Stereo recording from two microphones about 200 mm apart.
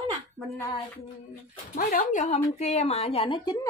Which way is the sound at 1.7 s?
40° left (ahead or behind).